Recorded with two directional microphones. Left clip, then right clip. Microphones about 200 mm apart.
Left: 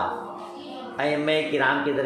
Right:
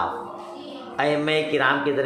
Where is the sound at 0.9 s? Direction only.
10° right (ahead or behind).